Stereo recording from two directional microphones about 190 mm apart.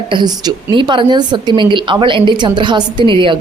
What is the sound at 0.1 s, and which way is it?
A woman's voice, 20° right (ahead or behind).